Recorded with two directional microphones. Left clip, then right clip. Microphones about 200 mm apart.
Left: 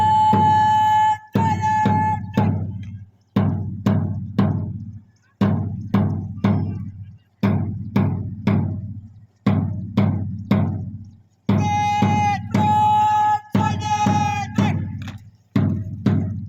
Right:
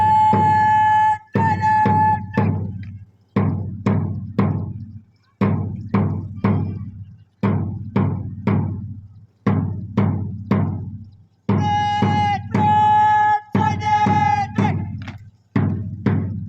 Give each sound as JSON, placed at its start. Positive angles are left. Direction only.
{"t": 0.0, "sound": "a sound", "side_deg": 15}
{"t": 0.4, "sound": "music", "side_deg": 15}
{"t": 2.3, "sound": "a sound", "side_deg": 45}
{"t": 3.3, "sound": "music", "side_deg": 45}
{"t": 11.6, "sound": "music", "side_deg": 20}
{"t": 12.5, "sound": "music", "side_deg": 45}
{"t": 14.2, "sound": "music", "side_deg": 20}
{"t": 14.6, "sound": "a sound", "side_deg": 20}
{"t": 15.5, "sound": "music", "side_deg": 45}